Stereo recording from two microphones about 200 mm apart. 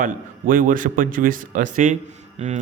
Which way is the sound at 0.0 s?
40° right (ahead or behind).